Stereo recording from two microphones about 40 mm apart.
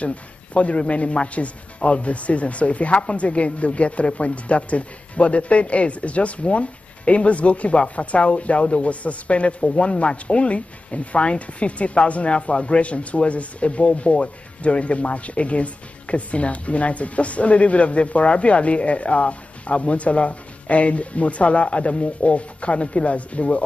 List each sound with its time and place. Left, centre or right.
0.0 s speech: left